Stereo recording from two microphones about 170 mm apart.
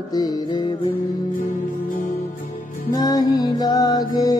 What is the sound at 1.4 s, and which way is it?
Music, 50° left (ahead or behind).